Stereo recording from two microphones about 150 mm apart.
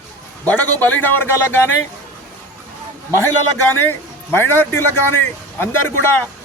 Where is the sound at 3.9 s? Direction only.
15° left (ahead or behind).